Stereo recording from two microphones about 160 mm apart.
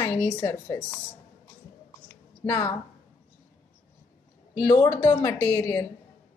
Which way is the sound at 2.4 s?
15° left (ahead or behind).